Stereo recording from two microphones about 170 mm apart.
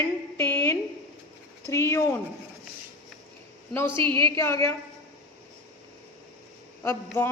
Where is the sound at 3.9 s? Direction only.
30° right (ahead or behind).